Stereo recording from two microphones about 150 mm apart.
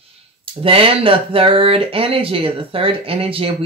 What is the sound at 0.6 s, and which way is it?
Speech, 40° right (ahead or behind).